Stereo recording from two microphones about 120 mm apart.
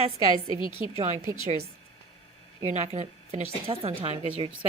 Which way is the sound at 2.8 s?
85° right.